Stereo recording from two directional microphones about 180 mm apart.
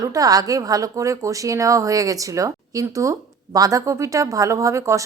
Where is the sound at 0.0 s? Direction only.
20° right (ahead or behind).